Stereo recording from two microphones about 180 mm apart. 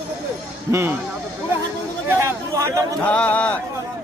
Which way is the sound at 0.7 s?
15° right (ahead or behind).